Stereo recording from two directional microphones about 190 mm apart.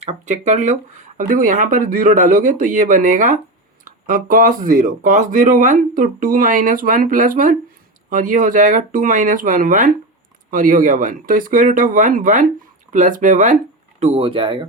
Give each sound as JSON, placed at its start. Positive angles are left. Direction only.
{"t": 0.0, "sound": "speech", "side_deg": -35}
{"t": 14.0, "sound": "speech", "side_deg": -30}